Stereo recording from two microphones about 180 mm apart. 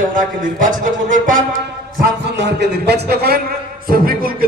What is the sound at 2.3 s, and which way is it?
A man's voice, 75° right (ahead or behind).